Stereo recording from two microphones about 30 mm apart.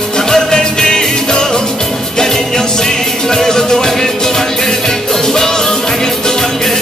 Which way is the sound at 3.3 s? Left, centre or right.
Centre.